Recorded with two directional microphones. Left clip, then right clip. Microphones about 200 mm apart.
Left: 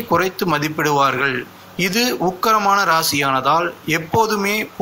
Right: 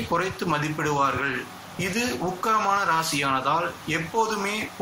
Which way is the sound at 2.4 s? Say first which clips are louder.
Left 7 dB; 50° left (ahead or behind).